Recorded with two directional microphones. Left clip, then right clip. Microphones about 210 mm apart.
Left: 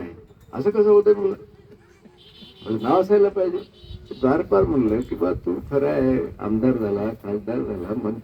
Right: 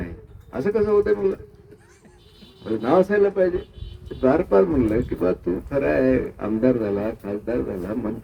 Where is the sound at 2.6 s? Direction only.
30° right (ahead or behind).